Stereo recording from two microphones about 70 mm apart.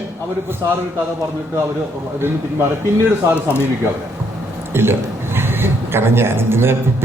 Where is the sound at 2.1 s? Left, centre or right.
Right.